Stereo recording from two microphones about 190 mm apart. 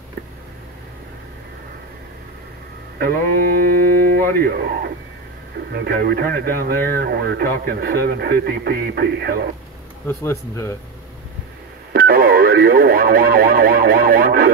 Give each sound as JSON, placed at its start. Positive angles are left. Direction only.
{"t": 3.0, "sound": "a sound", "side_deg": -50}
{"t": 4.4, "sound": "a man's voice", "side_deg": -55}
{"t": 10.0, "sound": "speech", "side_deg": 15}
{"t": 11.9, "sound": "radio", "side_deg": -50}